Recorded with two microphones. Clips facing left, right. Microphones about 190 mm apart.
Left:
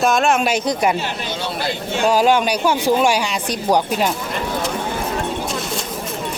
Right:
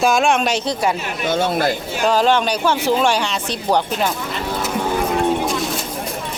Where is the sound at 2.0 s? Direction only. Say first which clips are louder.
Left 1 dB; 10° left (ahead or behind).